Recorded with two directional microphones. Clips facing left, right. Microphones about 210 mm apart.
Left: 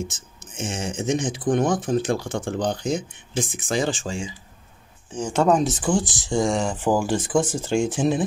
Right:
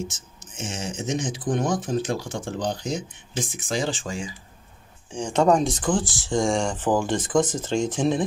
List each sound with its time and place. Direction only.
0.6 s speech: 55° left (ahead or behind)
5.1 s speech: 5° left (ahead or behind)
6.4 s speech: 5° left (ahead or behind)